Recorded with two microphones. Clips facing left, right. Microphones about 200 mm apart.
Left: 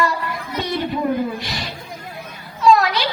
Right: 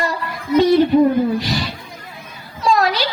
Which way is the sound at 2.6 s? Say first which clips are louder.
Left 2 dB; 35° right (ahead or behind).